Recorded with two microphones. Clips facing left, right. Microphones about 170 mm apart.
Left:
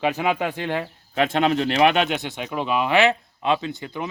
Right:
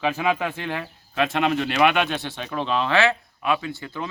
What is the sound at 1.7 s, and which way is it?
Speech, 30° left (ahead or behind).